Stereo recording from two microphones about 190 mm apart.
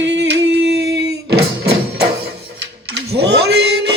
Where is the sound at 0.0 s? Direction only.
70° right (ahead or behind).